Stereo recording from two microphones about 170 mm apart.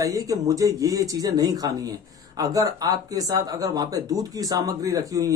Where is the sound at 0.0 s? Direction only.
20° right (ahead or behind).